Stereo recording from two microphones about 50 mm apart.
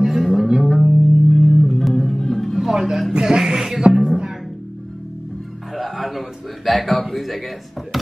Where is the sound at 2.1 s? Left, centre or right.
Centre.